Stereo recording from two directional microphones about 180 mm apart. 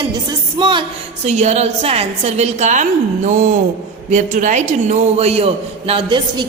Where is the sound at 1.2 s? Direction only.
40° right (ahead or behind).